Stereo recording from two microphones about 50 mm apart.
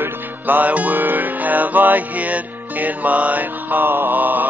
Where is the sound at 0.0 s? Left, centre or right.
Right.